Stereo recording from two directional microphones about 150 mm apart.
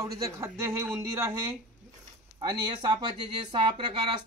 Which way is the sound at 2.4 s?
30° right (ahead or behind).